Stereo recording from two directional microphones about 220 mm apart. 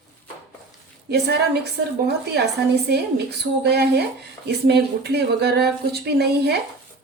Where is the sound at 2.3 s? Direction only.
50° right (ahead or behind).